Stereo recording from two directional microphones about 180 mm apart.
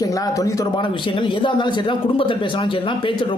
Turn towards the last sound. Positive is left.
turn(degrees=30)  # may be behind; listen again after turning